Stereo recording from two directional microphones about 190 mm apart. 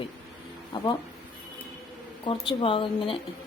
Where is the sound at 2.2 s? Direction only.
25° left (ahead or behind).